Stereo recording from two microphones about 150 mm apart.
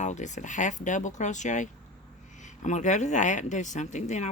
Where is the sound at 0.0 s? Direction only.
55° left (ahead or behind).